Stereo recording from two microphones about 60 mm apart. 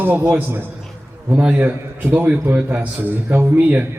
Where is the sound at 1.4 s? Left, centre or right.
Right.